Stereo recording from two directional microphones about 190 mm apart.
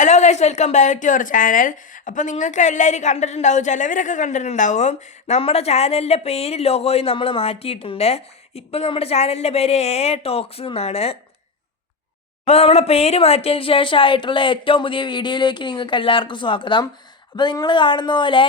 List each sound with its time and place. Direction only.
0.0 s a woman's voice: 35° left (ahead or behind)
12.5 s speech: 35° left (ahead or behind)